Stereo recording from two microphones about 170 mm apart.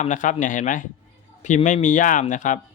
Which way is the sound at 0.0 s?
45° left (ahead or behind).